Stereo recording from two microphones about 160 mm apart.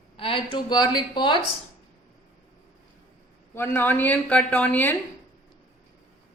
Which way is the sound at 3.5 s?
15° left (ahead or behind).